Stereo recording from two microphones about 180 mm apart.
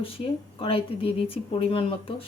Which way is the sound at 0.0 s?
30° left (ahead or behind).